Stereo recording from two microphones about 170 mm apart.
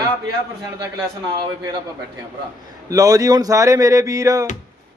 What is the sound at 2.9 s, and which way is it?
A man's voice, 20° right (ahead or behind).